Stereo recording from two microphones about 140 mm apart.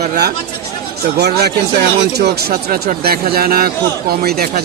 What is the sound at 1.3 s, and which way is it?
Speech, 90° right.